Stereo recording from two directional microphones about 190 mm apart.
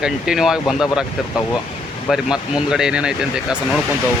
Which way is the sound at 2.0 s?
5° right (ahead or behind).